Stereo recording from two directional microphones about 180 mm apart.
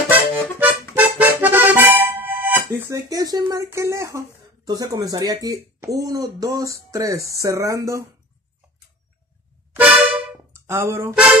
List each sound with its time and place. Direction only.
0.1 s accordion: 10° right (ahead or behind)
4.6 s speech: 20° right (ahead or behind)
10.0 s music: 10° right (ahead or behind)